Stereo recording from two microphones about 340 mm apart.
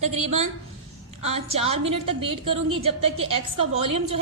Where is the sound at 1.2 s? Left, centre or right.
Centre.